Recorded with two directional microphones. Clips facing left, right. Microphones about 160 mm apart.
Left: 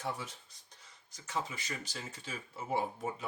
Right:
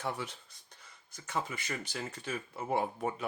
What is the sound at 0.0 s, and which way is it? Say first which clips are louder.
Speech: right 2 dB; 65° right (ahead or behind).